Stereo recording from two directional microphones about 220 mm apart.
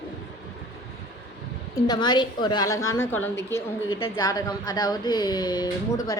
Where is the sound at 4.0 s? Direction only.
20° left (ahead or behind).